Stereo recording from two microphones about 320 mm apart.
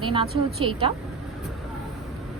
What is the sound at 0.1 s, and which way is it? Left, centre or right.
Speech, centre.